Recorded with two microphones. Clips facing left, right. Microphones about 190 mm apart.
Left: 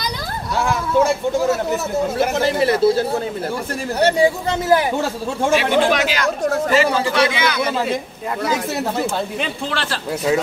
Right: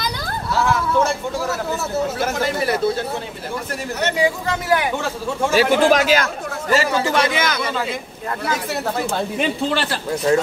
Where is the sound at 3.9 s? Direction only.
30° left (ahead or behind).